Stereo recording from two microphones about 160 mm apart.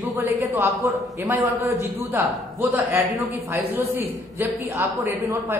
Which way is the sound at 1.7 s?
15° right (ahead or behind).